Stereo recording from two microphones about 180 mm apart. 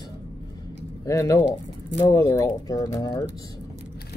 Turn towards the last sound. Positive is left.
turn(degrees=20)  # may be behind; listen again after turning